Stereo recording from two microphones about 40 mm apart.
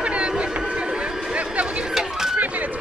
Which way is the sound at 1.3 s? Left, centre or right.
Right.